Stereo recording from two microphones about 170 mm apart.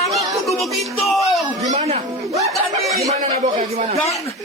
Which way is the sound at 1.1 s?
Centre (ahead or behind).